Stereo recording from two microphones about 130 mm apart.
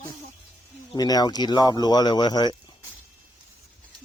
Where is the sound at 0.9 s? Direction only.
30° left (ahead or behind).